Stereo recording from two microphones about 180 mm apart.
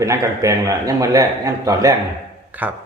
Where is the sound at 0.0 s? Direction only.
20° right (ahead or behind).